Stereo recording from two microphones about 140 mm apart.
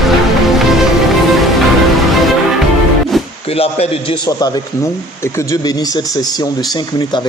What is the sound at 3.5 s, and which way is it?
Speech, 45° left (ahead or behind).